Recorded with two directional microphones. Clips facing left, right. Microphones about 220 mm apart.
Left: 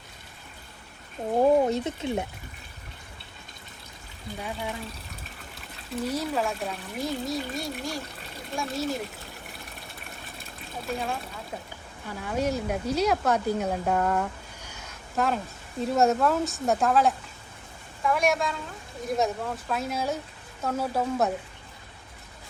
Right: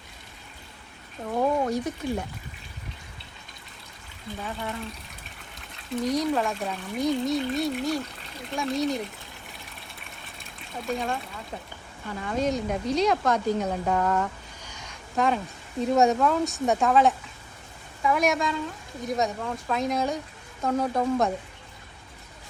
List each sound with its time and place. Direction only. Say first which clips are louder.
1.3 s speech: left 4 dB; 30° left (ahead or behind)
4.4 s speech: even; 10° left (ahead or behind)
6.1 s speech: right 3 dB; 5° left (ahead or behind)
10.8 s speech: right 2 dB; 5° left (ahead or behind)